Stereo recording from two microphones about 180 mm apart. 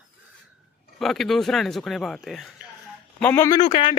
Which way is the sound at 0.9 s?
Centre (ahead or behind).